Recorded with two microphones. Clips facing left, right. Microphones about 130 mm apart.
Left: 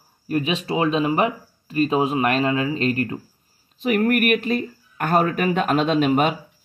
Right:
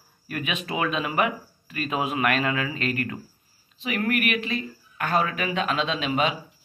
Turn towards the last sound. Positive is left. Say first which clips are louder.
# left 7 dB
turn(degrees=50)  # may be behind; listen again after turning